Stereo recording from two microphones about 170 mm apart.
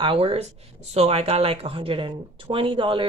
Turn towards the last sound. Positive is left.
turn(degrees=-30)  # may be behind; listen again after turning